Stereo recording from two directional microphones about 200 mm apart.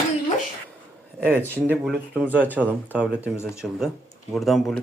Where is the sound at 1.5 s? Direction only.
5° right (ahead or behind).